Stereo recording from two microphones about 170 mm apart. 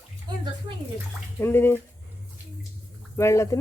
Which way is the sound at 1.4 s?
15° left (ahead or behind).